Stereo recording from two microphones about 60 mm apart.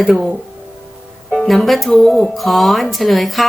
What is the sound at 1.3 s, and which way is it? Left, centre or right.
Speech, centre.